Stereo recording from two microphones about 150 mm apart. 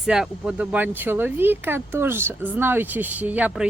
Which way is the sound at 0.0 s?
5° right (ahead or behind).